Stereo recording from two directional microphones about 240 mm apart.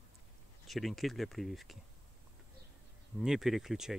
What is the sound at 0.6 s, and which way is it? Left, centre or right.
Speech, centre.